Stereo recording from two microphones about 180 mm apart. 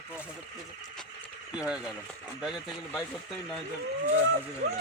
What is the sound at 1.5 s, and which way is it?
Speech, 5° right (ahead or behind).